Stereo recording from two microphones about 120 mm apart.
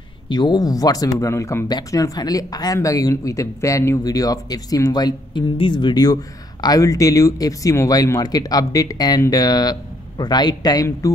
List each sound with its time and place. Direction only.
0.3 s speech: 35° left (ahead or behind)